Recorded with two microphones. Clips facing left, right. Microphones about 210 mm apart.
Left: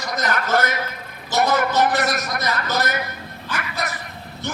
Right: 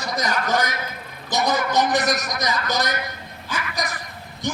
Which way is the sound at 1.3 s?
15° right (ahead or behind).